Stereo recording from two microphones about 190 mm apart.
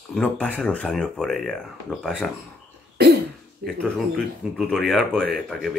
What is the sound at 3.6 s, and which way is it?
Speech, 50° right (ahead or behind).